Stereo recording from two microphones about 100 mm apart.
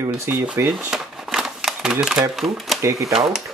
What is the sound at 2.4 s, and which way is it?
Speech, centre (ahead or behind).